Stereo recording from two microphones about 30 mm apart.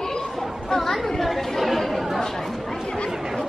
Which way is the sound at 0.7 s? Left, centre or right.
Centre.